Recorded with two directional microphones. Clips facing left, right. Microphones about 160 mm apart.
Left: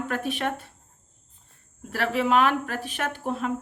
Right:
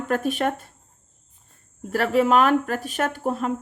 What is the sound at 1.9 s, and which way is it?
A woman's voice, 45° right (ahead or behind).